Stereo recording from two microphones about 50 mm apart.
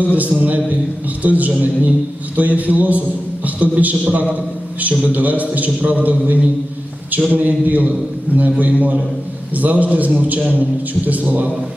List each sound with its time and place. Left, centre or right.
0.0 s a man's voice: right